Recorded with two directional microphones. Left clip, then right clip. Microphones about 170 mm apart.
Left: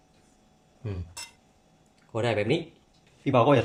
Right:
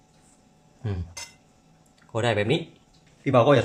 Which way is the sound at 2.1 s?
15° right (ahead or behind).